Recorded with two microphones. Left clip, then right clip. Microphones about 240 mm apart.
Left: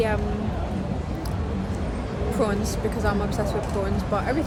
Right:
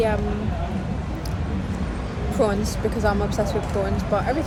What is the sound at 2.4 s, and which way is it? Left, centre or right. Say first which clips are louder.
Speech: right 4 dB; centre.